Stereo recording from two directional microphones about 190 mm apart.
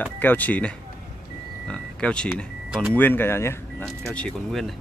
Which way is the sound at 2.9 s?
10° left (ahead or behind).